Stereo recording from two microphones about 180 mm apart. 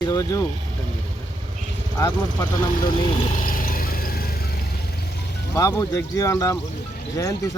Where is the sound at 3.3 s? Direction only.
50° left (ahead or behind).